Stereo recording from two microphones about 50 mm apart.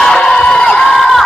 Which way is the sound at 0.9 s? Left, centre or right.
Centre.